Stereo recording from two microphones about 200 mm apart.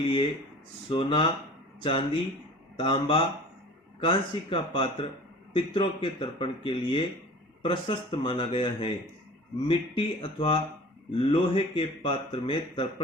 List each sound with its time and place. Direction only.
0.0 s speech: 25° left (ahead or behind)